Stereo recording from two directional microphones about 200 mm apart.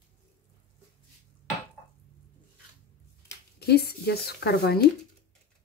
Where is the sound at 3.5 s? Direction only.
55° left (ahead or behind).